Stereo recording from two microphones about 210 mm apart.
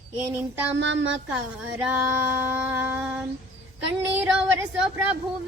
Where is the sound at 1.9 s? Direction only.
10° right (ahead or behind).